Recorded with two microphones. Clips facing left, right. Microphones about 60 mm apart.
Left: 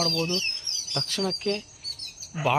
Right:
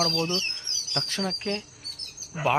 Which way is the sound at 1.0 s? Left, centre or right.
Right.